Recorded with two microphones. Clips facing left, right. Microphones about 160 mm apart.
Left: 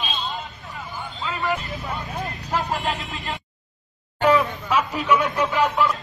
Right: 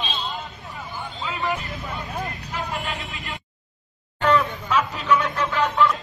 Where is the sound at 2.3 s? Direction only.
40° left (ahead or behind).